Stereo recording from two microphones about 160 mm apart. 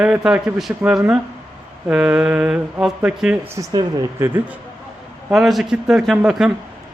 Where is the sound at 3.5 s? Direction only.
20° right (ahead or behind).